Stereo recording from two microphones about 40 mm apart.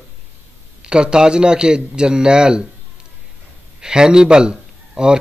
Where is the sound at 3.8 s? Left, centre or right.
Centre.